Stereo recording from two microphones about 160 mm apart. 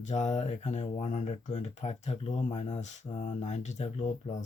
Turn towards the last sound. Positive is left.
turn(degrees=45)  # may be behind; listen again after turning